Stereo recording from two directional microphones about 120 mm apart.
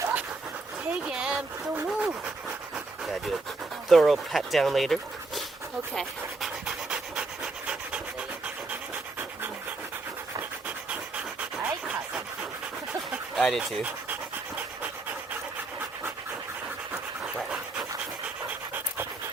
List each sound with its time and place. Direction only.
0.0 s dog: 10° right (ahead or behind)
1.0 s a sound: 10° right (ahead or behind)
2.7 s pant: centre (ahead or behind)
3.8 s speech: centre (ahead or behind)
5.9 s pant: centre (ahead or behind)
11.5 s dog: 10° right (ahead or behind)
12.9 s a sound: 10° right (ahead or behind)
13.4 s speech: centre (ahead or behind)
13.8 s pant: 15° right (ahead or behind)
16.9 s pant: 5° right (ahead or behind)